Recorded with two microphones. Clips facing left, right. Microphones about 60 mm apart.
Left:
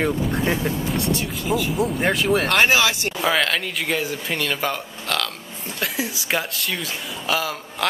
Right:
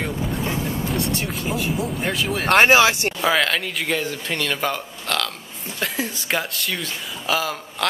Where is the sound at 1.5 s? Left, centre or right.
Centre.